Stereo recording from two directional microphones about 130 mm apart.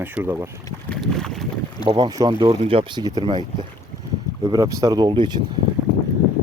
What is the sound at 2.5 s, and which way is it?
Speech, 45° right (ahead or behind).